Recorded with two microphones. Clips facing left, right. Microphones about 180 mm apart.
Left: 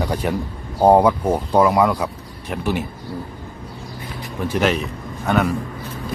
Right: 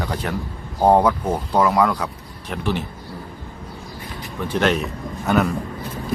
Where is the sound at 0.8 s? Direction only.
10° left (ahead or behind).